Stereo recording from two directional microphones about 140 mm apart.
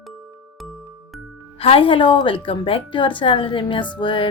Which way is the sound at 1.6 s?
40° left (ahead or behind).